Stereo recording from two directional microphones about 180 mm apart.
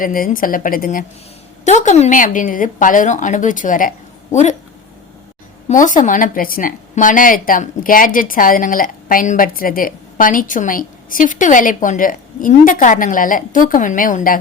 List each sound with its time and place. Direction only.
0.0 s a woman's voice: 50° left (ahead or behind)
1.6 s a woman's voice: 40° left (ahead or behind)
5.6 s a woman's voice: 45° left (ahead or behind)